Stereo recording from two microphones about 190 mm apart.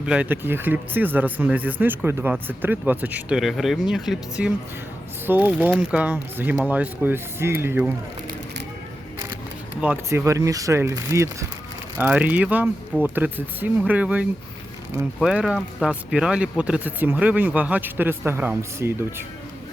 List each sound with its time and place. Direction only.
0.0 s speech: 5° right (ahead or behind)
9.8 s speech: 10° right (ahead or behind)